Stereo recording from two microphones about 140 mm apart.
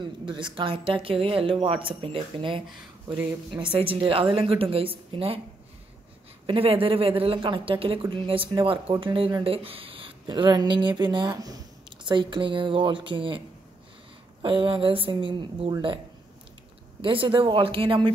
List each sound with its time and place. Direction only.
0.0 s speech: 35° right (ahead or behind)
3.7 s speech: 40° right (ahead or behind)
6.4 s speech: 40° right (ahead or behind)
14.4 s speech: 35° right (ahead or behind)
17.0 s speech: 40° right (ahead or behind)